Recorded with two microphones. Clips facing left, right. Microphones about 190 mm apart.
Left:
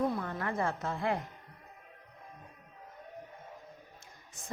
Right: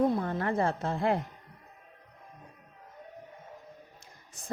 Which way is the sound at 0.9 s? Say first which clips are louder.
Right 5 dB; 40° right (ahead or behind).